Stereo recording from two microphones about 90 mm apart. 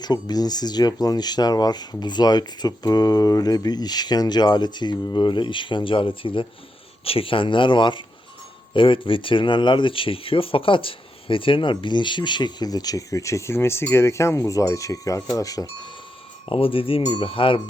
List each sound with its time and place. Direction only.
0.0 s speech: 50° left (ahead or behind); by 6.5 s 75° left (ahead or behind)
7.0 s speech: 90° left; by 15.9 s 40° left (ahead or behind)
16.5 s speech: 90° left
17.1 s speech: 75° left (ahead or behind)